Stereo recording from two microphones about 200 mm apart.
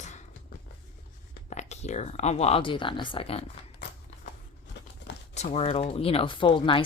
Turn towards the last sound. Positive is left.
turn(degrees=25)  # may be behind; listen again after turning